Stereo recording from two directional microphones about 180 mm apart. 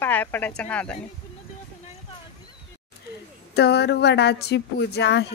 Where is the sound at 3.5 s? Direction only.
70° left (ahead or behind).